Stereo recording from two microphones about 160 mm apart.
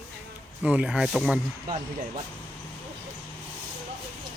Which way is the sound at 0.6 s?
5° right (ahead or behind).